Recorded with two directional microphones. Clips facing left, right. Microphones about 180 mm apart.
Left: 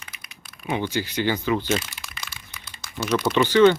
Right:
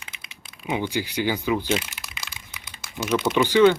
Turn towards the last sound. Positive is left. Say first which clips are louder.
# left 1 dB
turn(degrees=-10)  # may be behind; listen again after turning